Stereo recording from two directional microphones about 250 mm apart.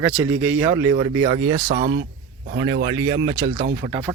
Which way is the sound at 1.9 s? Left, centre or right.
Right.